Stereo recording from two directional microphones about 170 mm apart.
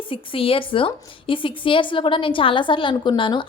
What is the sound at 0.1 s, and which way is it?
A woman's voice, 30° left (ahead or behind).